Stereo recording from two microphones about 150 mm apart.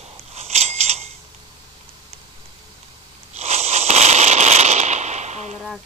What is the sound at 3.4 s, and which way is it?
Fireworks, 45° right (ahead or behind).